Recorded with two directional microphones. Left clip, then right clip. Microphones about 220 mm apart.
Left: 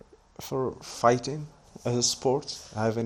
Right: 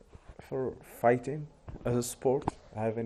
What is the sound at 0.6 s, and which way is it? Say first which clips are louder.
A man's voice: left 4 dB; 15° left (ahead or behind).